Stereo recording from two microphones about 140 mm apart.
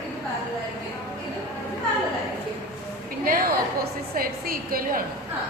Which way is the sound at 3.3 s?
90° right.